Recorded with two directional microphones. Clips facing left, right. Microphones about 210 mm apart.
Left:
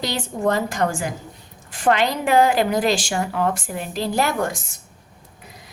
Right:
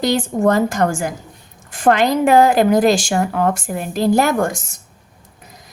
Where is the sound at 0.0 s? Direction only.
45° right (ahead or behind).